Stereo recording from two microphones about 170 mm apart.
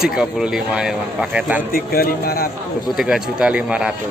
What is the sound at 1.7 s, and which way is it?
Speech, 60° left (ahead or behind).